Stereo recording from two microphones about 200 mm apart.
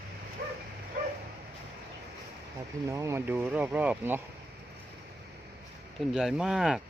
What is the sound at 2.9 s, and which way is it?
Speech, 15° right (ahead or behind).